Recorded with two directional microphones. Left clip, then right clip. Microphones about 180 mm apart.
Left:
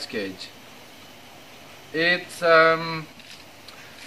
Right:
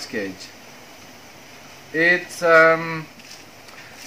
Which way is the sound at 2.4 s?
20° right (ahead or behind).